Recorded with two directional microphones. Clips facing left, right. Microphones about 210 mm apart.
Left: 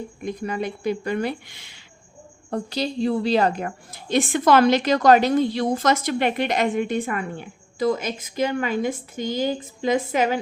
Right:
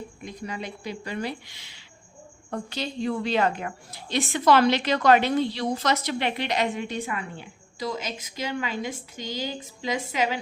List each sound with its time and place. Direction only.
0.2 s a woman's voice: 50° left (ahead or behind)
2.5 s a woman's voice: 35° left (ahead or behind)